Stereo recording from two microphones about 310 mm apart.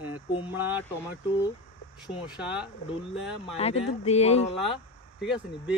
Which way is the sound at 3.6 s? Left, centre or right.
Centre.